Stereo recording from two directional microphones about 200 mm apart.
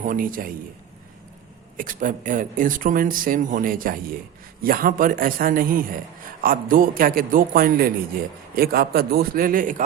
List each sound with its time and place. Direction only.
0.0 s speech: 45° right (ahead or behind)
1.7 s speech: 40° right (ahead or behind)